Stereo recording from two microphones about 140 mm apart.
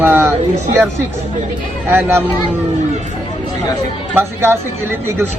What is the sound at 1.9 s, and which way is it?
Speech, 15° right (ahead or behind).